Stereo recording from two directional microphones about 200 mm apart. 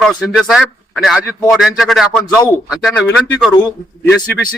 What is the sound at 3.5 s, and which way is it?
Speech, 20° left (ahead or behind).